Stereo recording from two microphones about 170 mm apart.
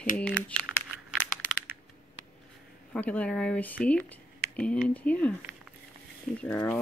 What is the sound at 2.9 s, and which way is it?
Speech, 10° left (ahead or behind).